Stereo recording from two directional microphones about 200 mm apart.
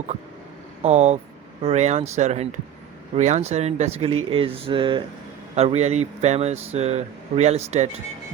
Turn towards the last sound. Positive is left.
turn(degrees=-35)  # may be behind; listen again after turning